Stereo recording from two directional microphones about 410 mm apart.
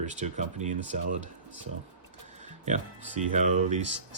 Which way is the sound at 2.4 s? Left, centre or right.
Centre.